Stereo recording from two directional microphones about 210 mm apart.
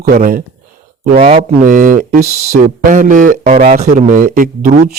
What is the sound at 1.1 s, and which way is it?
A man's voice, 30° right (ahead or behind).